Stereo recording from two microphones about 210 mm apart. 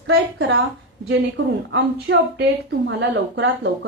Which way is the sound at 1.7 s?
55° right (ahead or behind).